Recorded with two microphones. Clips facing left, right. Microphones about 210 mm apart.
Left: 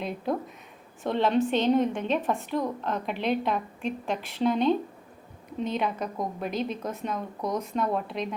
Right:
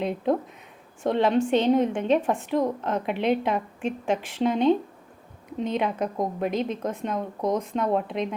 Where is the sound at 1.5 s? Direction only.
15° right (ahead or behind).